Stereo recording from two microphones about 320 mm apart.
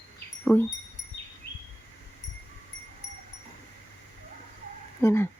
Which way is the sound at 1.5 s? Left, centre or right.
Left.